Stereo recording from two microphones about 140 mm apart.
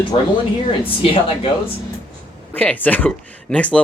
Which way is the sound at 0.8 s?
40° left (ahead or behind).